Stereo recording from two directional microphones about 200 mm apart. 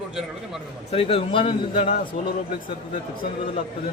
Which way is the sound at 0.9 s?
30° left (ahead or behind).